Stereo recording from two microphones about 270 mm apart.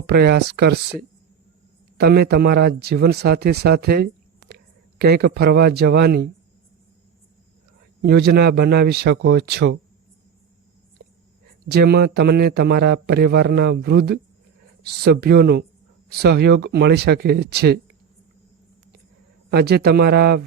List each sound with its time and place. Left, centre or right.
0.1 s a man's voice: right
2.0 s speech: right
8.0 s a man's voice: right
11.7 s a man's voice: right
19.5 s a man's voice: right